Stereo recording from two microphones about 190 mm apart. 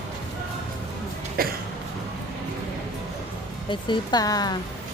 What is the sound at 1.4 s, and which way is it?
Cough, 50° right (ahead or behind).